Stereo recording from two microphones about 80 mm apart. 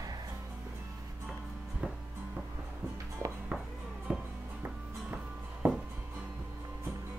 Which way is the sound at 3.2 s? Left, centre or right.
Right.